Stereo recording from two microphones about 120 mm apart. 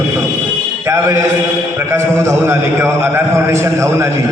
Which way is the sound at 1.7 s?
20° right (ahead or behind).